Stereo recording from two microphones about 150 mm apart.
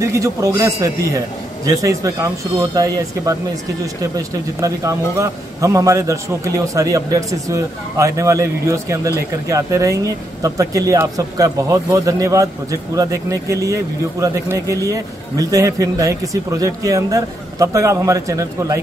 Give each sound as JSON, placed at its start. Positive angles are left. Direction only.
{"t": 0.0, "sound": "a man's voice", "side_deg": -20}
{"t": 4.6, "sound": "a man's voice", "side_deg": -20}